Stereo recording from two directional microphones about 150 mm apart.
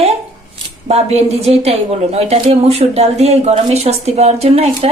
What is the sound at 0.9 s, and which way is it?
A woman's voice, 45° right (ahead or behind).